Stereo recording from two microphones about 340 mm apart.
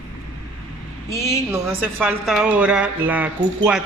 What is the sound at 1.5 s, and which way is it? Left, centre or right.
Speech, centre.